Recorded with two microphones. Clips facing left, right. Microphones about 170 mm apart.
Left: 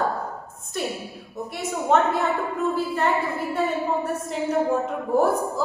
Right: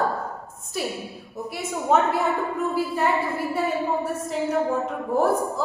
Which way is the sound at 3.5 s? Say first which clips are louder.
Left 1 dB; 5° right (ahead or behind).